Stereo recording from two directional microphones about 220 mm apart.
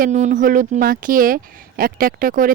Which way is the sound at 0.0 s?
30° right (ahead or behind).